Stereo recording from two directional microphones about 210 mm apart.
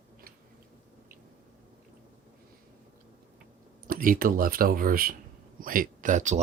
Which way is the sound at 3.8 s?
40° right (ahead or behind).